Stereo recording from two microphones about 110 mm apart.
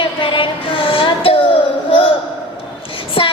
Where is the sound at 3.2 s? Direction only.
60° left (ahead or behind).